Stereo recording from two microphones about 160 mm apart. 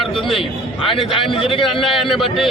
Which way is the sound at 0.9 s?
35° left (ahead or behind).